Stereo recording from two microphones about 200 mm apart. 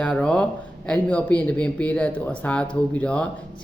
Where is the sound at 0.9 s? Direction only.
10° left (ahead or behind).